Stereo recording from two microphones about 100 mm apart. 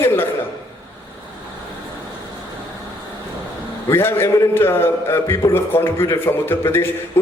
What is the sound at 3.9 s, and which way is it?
A man's voice, 25° left (ahead or behind).